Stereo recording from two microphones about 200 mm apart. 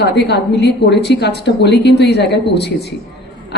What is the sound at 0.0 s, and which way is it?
A woman's voice, 55° left (ahead or behind).